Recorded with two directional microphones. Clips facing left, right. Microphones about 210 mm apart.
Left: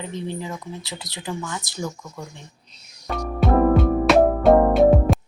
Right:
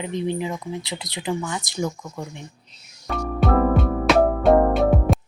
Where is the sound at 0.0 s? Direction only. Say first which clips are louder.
Right 5 dB; 15° right (ahead or behind).